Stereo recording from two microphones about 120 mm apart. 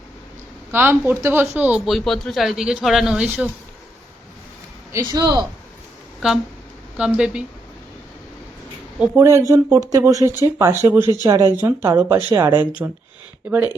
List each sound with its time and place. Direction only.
0.7 s speech: 15° right (ahead or behind)
1.9 s speech: centre (ahead or behind)
4.9 s speech: 30° right (ahead or behind)
6.2 s speech: 5° right (ahead or behind)
9.0 s speech: 20° right (ahead or behind)